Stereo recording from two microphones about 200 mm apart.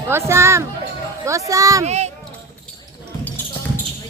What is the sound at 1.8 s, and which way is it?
Speech, 35° right (ahead or behind).